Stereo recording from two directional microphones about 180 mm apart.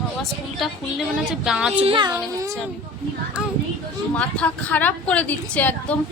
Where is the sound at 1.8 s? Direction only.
25° right (ahead or behind).